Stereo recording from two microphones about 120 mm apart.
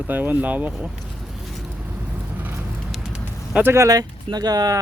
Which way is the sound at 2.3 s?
15° right (ahead or behind).